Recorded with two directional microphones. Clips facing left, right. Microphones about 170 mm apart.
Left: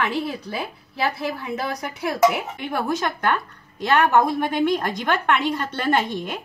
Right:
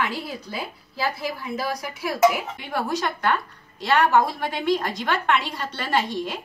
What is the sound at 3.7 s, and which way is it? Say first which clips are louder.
A woman's voice: left 1 dB; 55° left (ahead or behind).